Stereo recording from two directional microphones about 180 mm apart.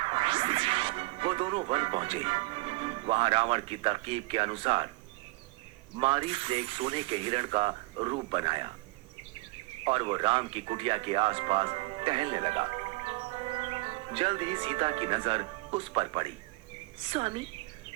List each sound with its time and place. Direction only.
0.0 s speech: 30° right (ahead or behind)
6.0 s speech: 30° right (ahead or behind)
9.8 s a woman's voice: 30° right (ahead or behind)